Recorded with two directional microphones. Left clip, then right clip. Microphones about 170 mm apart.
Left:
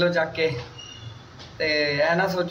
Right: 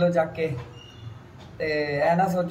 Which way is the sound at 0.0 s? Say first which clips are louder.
Left 1 dB; 5° right (ahead or behind).